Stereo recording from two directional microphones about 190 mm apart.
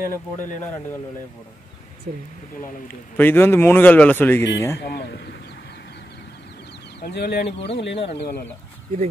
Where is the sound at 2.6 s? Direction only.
45° left (ahead or behind).